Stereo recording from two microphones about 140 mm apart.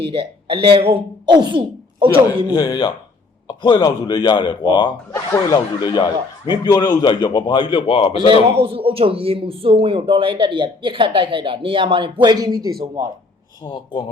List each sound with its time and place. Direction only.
0.0 s speech: 40° right (ahead or behind)
2.5 s a man's voice: 30° left (ahead or behind)
5.1 s a man's voice: 20° left (ahead or behind); by 8.4 s 40° left (ahead or behind)
8.4 s speech: 40° right (ahead or behind)